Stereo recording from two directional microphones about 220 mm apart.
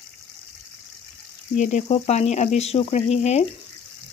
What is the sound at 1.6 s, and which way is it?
Speech, 35° left (ahead or behind).